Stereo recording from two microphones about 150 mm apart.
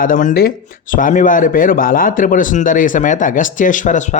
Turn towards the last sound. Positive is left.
turn(degrees=55)  # may be behind; listen again after turning